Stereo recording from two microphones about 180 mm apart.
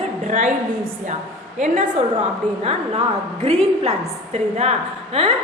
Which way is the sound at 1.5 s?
40° right (ahead or behind).